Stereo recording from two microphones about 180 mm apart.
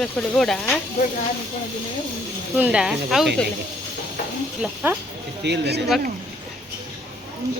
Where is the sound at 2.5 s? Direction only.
5° right (ahead or behind).